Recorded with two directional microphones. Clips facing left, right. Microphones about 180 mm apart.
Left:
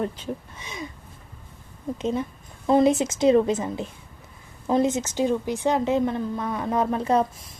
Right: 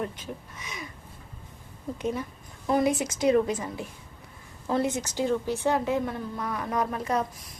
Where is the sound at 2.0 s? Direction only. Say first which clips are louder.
Left 4 dB; 25° left (ahead or behind).